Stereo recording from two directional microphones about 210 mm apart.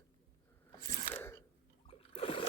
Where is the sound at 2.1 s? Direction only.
25° left (ahead or behind).